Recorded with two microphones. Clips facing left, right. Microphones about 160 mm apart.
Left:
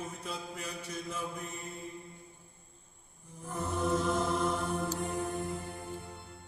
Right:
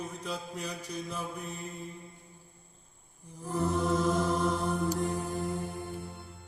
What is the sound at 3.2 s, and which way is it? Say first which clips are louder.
Mantra: right 6 dB; 35° right (ahead or behind).